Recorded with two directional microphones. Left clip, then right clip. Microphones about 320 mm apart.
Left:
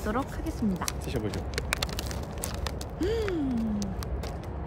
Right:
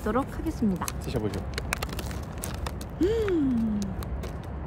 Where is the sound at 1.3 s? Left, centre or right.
Centre.